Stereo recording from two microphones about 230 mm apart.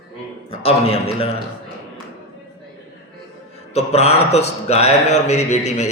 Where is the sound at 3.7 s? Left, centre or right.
Left.